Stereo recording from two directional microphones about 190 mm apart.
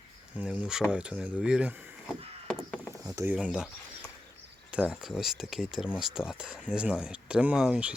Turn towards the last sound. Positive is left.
turn(degrees=-5)  # may be behind; listen again after turning